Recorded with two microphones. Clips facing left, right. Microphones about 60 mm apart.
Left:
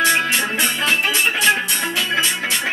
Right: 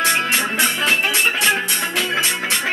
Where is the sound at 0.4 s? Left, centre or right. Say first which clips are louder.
Right 1 dB; right.